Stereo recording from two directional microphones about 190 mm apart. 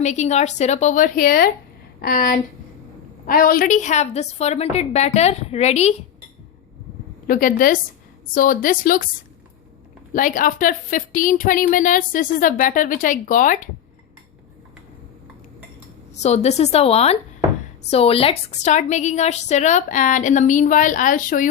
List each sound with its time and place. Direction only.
0.0 s a woman's voice: 35° left (ahead or behind)
7.3 s a woman's voice: 45° left (ahead or behind)
10.1 s a woman's voice: 45° left (ahead or behind)
16.1 s a woman's voice: 35° left (ahead or behind)